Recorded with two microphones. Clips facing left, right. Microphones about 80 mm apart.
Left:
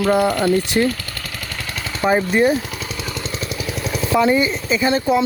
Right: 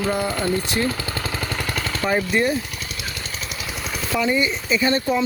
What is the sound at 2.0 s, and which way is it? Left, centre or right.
Speech, left.